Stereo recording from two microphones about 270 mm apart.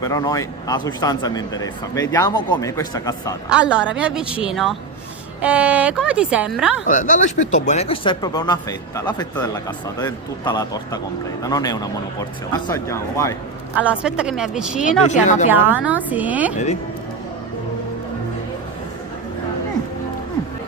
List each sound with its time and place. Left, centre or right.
0.0 s speech: centre
3.5 s speech: centre
6.8 s speech: left; by 13.3 s centre
13.7 s speech: centre
15.1 s speech: left
15.4 s speech: centre